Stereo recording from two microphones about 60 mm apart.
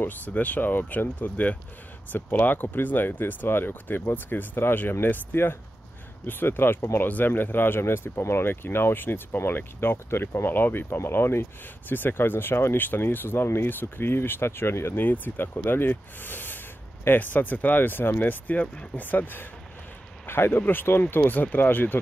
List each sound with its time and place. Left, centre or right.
0.0 s speech: left
15.0 s speech: left